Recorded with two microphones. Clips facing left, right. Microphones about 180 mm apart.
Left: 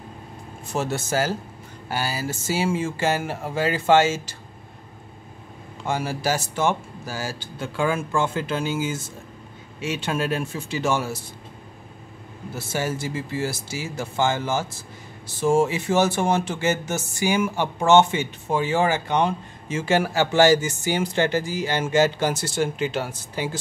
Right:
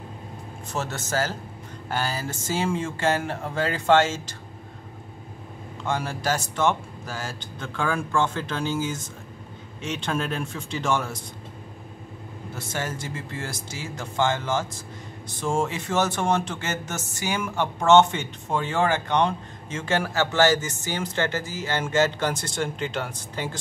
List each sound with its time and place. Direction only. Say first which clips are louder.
0.7 s speech: left 4 dB; 10° left (ahead or behind)
5.9 s speech: left 2 dB; 5° left (ahead or behind)
12.5 s speech: left 5 dB; 10° left (ahead or behind)